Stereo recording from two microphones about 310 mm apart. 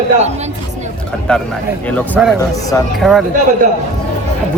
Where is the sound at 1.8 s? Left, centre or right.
Centre.